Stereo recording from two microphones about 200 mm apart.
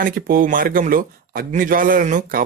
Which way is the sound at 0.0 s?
45° right (ahead or behind).